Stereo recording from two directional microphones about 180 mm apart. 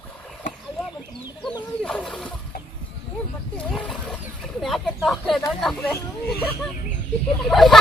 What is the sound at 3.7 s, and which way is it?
Wild animals, 5° left (ahead or behind).